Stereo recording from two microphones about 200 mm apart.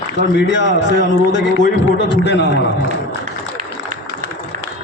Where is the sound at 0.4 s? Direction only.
60° left (ahead or behind).